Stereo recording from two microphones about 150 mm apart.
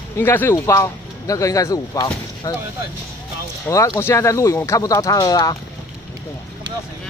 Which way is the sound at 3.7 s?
20° left (ahead or behind).